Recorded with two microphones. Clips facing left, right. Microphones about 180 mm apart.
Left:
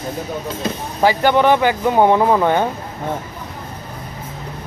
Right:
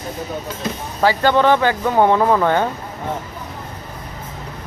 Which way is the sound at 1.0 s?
15° left (ahead or behind).